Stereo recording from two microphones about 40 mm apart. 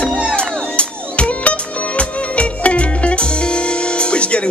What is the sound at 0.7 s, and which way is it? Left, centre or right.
Music, left.